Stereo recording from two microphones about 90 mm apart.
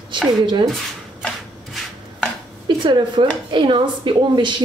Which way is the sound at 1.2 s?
5° left (ahead or behind).